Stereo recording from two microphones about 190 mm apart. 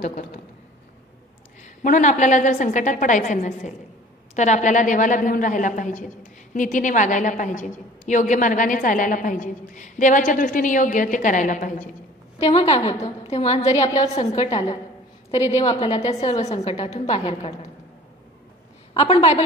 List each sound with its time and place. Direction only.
1.8 s a woman's voice: 40° left (ahead or behind)
12.4 s a woman's voice: 30° left (ahead or behind)
13.7 s a woman's voice: 20° left (ahead or behind)
15.4 s a woman's voice: 35° left (ahead or behind)
16.7 s a woman's voice: 25° left (ahead or behind)
18.9 s a woman's voice: 25° left (ahead or behind)